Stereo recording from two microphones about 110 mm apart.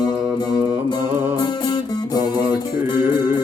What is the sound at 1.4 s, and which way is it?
Music, 40° left (ahead or behind).